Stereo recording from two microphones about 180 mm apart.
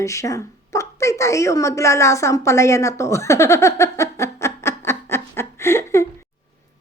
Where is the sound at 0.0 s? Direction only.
15° left (ahead or behind).